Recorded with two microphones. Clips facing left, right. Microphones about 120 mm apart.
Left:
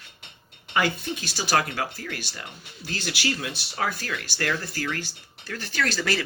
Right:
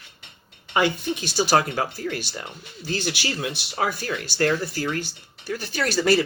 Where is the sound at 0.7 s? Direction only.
20° right (ahead or behind).